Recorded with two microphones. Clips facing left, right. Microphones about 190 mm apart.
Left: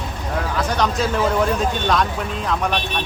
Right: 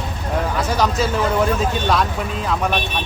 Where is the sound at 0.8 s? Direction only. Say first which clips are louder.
Even; centre (ahead or behind).